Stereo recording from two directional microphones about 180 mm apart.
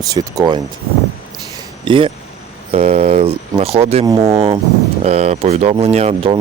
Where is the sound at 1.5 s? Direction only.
30° right (ahead or behind).